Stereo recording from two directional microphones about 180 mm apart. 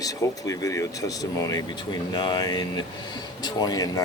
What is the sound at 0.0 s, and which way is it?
Speech, 20° left (ahead or behind).